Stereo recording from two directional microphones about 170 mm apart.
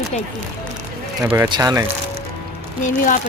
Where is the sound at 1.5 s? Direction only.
20° right (ahead or behind).